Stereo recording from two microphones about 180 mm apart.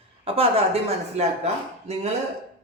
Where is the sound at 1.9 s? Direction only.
35° right (ahead or behind).